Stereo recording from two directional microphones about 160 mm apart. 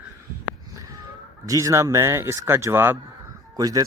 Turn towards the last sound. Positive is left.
turn(degrees=-25)  # may be behind; listen again after turning